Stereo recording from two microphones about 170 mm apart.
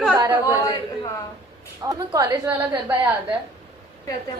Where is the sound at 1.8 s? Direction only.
20° right (ahead or behind).